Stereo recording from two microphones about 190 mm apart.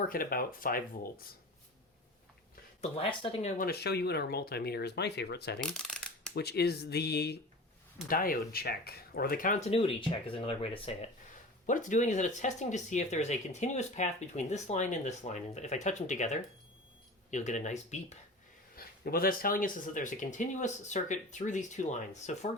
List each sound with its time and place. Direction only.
0.0 s speech: 50° left (ahead or behind)
2.8 s speech: 30° left (ahead or behind)
3.6 s speech: 55° left (ahead or behind); by 10.9 s 30° left (ahead or behind)
11.6 s speech: 40° left (ahead or behind)
18.8 s speech: 50° left (ahead or behind)